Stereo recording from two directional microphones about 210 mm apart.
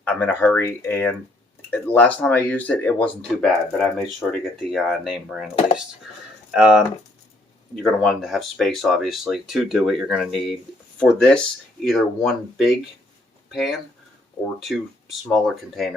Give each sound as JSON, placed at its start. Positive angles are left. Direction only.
{"t": 0.0, "sound": "speech", "side_deg": 10}
{"t": 6.5, "sound": "speech", "side_deg": -5}
{"t": 15.3, "sound": "speech", "side_deg": 0}